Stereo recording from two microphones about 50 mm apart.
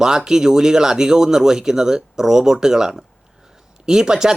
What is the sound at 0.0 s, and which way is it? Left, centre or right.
Speech, centre.